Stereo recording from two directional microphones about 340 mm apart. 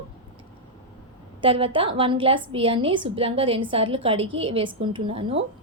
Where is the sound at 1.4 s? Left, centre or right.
Centre.